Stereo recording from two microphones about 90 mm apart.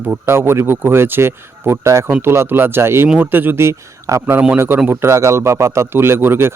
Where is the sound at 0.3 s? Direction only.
25° right (ahead or behind).